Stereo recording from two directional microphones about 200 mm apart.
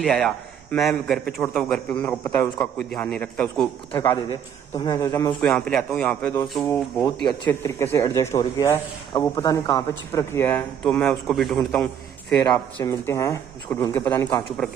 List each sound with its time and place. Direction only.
0.0 s a man's voice: centre (ahead or behind)
3.9 s a man's voice: 15° left (ahead or behind)
5.4 s a man's voice: centre (ahead or behind)
12.4 s a man's voice: 15° left (ahead or behind)